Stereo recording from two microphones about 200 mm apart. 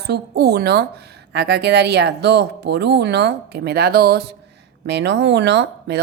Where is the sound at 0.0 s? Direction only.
55° right (ahead or behind).